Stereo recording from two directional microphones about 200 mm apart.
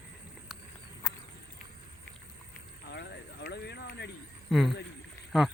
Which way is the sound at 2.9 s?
60° left (ahead or behind).